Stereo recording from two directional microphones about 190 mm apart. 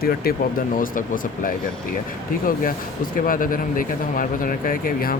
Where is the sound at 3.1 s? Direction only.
45° left (ahead or behind).